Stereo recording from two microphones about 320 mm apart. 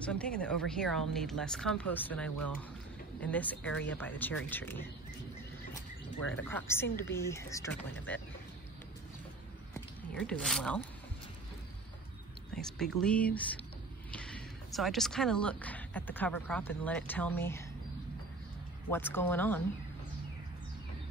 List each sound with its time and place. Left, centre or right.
0.0 s speech: centre
6.3 s speech: centre
9.8 s a sound: centre
12.5 s speech: centre
18.9 s speech: centre